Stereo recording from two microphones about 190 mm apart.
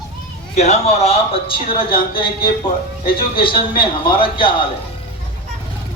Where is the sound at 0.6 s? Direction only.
35° left (ahead or behind).